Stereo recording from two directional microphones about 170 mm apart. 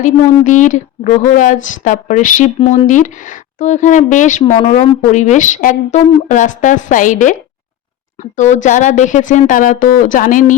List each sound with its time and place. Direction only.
0.0 s speech: 45° left (ahead or behind)